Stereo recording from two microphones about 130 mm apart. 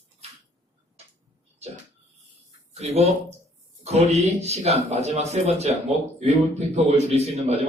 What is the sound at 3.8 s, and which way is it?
Speech, 55° right (ahead or behind).